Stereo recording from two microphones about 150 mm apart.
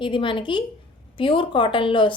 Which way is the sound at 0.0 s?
35° left (ahead or behind).